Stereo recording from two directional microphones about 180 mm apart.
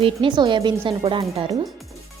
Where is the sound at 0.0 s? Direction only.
25° right (ahead or behind).